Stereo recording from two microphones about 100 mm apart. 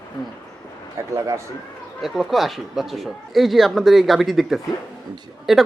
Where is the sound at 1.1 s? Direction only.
30° right (ahead or behind).